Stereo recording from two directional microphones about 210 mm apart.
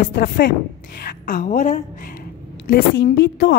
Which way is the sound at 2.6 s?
50° left (ahead or behind).